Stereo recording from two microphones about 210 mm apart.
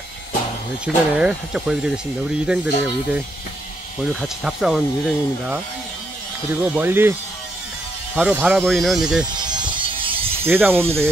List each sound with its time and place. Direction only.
0.8 s speech: 5° right (ahead or behind)
9.5 s music: 20° right (ahead or behind)
9.9 s mechanisms: 25° right (ahead or behind)
10.4 s speech: 10° right (ahead or behind)